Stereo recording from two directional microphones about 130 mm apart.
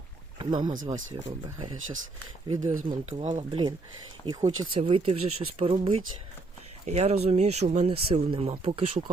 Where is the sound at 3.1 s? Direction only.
60° right (ahead or behind).